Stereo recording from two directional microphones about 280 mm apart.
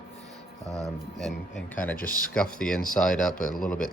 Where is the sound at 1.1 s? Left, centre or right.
Centre.